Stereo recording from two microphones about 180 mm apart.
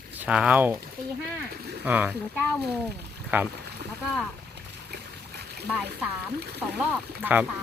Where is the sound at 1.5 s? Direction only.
60° right (ahead or behind).